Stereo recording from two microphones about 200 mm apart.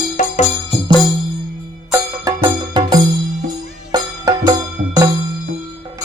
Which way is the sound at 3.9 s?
20° right (ahead or behind).